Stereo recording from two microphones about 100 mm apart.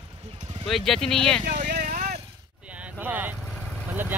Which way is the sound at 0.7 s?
5° left (ahead or behind).